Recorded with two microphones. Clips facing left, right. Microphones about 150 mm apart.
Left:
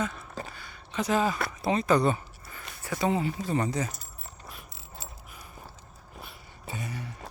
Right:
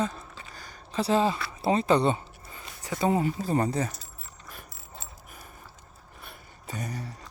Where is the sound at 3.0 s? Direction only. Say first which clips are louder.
Right 2 dB; 40° right (ahead or behind).